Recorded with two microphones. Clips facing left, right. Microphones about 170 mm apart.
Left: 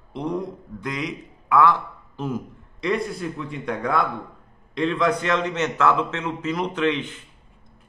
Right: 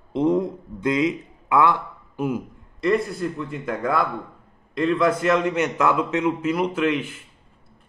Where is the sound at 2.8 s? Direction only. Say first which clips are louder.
Right 3 dB; centre (ahead or behind).